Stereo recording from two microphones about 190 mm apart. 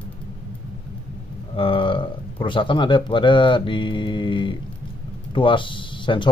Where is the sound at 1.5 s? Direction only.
30° left (ahead or behind).